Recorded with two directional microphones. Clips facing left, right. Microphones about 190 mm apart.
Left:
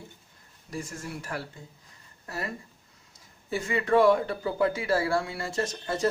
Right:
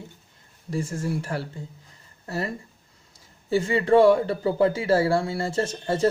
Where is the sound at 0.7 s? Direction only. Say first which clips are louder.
Right 8 dB; 30° right (ahead or behind).